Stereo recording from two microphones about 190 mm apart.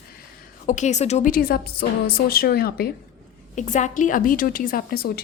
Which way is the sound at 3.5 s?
40° left (ahead or behind).